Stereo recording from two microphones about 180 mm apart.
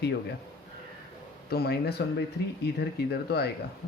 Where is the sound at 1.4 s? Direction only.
60° left (ahead or behind).